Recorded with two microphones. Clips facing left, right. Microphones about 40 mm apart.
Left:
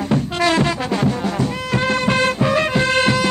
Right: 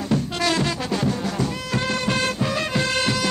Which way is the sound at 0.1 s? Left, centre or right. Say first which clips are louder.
Left 4 dB; left.